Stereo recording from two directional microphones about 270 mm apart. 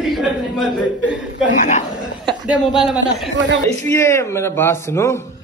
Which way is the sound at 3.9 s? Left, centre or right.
Centre.